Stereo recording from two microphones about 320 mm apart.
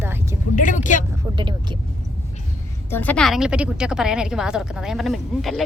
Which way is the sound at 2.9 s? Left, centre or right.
Centre.